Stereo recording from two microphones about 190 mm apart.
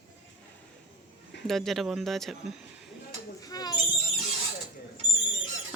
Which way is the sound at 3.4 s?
20° left (ahead or behind).